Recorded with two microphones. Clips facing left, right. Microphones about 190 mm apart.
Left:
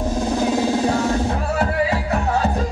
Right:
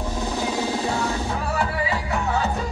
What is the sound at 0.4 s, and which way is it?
Music, 45° left (ahead or behind).